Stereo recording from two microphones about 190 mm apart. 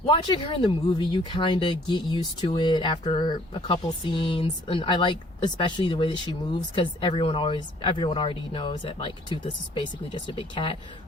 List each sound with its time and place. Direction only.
0.0 s speech: 25° left (ahead or behind)